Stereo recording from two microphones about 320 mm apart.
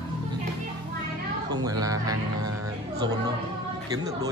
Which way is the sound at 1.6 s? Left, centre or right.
Centre.